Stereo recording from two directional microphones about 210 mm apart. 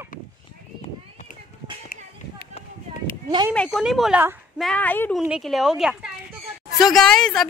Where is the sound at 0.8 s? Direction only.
35° left (ahead or behind).